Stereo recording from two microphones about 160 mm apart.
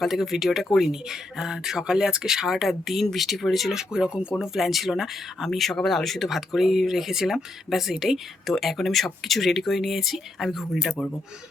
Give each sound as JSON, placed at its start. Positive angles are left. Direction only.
{"t": 0.0, "sound": "speech", "side_deg": 0}